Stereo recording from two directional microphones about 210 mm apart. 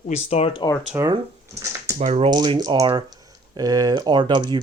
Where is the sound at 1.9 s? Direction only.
30° right (ahead or behind).